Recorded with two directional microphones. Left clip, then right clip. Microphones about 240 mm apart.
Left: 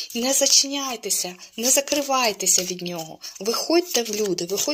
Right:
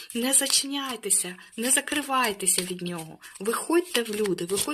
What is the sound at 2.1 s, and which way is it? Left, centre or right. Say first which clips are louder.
Speech: left 2 dB; centre.